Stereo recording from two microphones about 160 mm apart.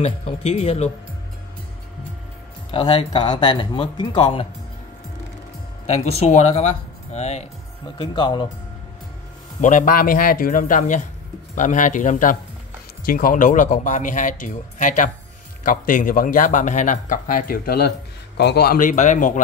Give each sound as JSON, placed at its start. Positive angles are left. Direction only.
{"t": 0.0, "sound": "speech", "side_deg": 40}
{"t": 2.7, "sound": "speech", "side_deg": 30}
{"t": 5.9, "sound": "speech", "side_deg": 40}
{"t": 8.0, "sound": "speech", "side_deg": 30}
{"t": 9.6, "sound": "a man's voice", "side_deg": 50}
{"t": 18.8, "sound": "speech", "side_deg": 50}